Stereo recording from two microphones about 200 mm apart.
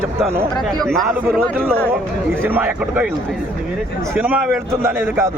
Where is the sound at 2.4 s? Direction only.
10° right (ahead or behind).